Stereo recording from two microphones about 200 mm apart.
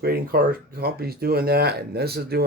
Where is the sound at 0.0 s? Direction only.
50° right (ahead or behind).